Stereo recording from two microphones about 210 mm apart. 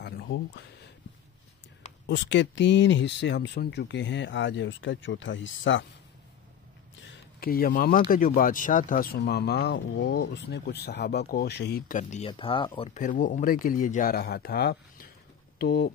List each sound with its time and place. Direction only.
0.0 s a sound: 55° left (ahead or behind)
2.0 s speech: 55° left (ahead or behind)
7.1 s speech: 45° left (ahead or behind)
12.3 s speech: 25° left (ahead or behind); by 15.9 s 50° left (ahead or behind)